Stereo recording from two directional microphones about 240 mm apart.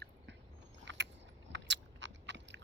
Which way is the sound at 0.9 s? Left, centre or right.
Right.